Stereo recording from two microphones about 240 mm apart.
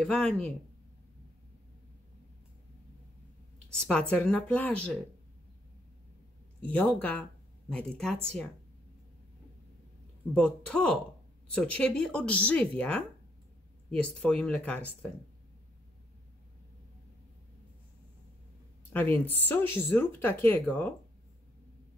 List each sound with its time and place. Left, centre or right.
0.0 s speech: centre
3.7 s speech: centre
6.6 s speech: centre
10.3 s speech: centre
18.9 s speech: centre